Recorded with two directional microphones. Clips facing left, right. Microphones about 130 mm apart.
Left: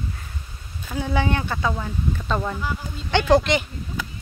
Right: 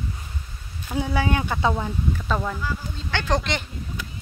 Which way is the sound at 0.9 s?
5° right (ahead or behind).